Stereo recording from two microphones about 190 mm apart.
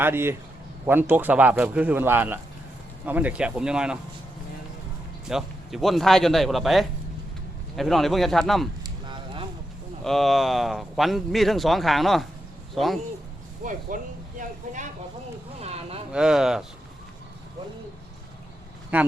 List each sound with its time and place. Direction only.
0.0 s speech: 10° right (ahead or behind)
5.3 s speech: centre (ahead or behind)
9.0 s a sound: 25° right (ahead or behind)
10.0 s speech: centre (ahead or behind)
13.7 s speech: 45° right (ahead or behind)
15.6 s a sound: 35° right (ahead or behind)
16.1 s speech: 5° right (ahead or behind)
18.9 s speech: 10° right (ahead or behind)